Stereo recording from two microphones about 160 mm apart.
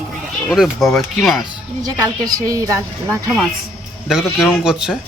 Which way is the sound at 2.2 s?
20° right (ahead or behind).